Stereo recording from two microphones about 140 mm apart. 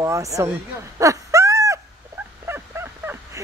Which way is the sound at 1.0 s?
20° right (ahead or behind).